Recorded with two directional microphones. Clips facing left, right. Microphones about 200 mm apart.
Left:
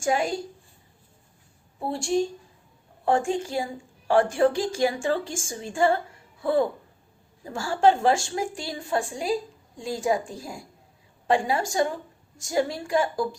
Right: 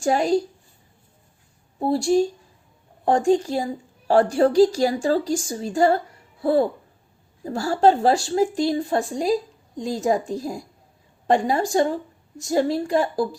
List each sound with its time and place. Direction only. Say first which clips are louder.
0.0 s a woman's voice: right 5 dB; 40° right (ahead or behind)
1.8 s a woman's voice: right 6 dB; 35° right (ahead or behind)